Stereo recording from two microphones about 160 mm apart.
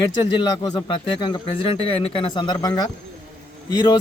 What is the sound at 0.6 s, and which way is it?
Speech, 25° left (ahead or behind).